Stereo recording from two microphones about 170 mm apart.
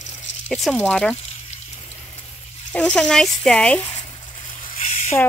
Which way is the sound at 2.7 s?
5° left (ahead or behind).